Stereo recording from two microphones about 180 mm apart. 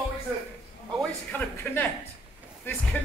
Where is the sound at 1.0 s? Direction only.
10° left (ahead or behind).